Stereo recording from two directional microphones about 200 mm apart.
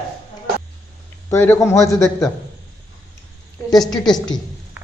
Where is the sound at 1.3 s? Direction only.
15° left (ahead or behind).